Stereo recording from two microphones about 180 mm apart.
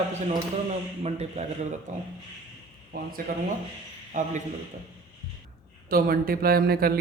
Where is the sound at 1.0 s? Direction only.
35° right (ahead or behind).